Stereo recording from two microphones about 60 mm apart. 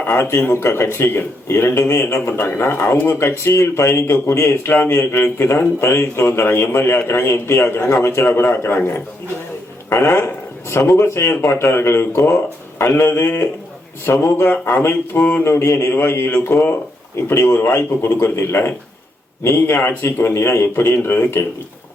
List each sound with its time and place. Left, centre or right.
0.1 s speech: left
15.2 s mantra: left
15.4 s speech: left